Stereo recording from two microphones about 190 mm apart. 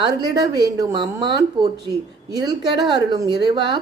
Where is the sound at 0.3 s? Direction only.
20° right (ahead or behind).